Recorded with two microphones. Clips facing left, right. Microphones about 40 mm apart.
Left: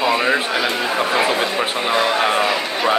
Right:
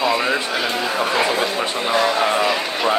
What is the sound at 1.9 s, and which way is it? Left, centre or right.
Speech, left.